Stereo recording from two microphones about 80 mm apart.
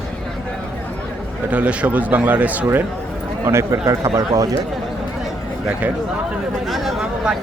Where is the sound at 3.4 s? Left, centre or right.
Right.